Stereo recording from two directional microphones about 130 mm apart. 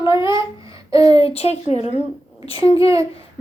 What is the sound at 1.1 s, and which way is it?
Speech, 50° left (ahead or behind).